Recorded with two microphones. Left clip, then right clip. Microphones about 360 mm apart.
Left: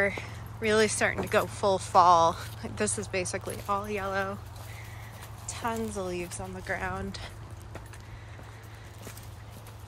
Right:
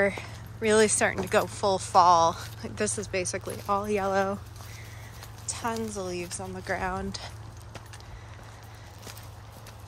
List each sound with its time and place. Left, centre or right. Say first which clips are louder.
0.0 s speech: right 2 dB; centre
5.5 s speech: right 1 dB; centre